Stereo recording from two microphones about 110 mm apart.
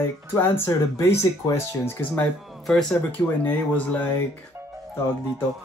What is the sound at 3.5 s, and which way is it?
Speech, 15° left (ahead or behind).